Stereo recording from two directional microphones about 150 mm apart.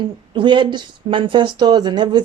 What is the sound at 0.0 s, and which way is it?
Speech, 30° right (ahead or behind).